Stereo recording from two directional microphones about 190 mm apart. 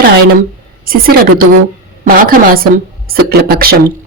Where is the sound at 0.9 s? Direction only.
50° right (ahead or behind).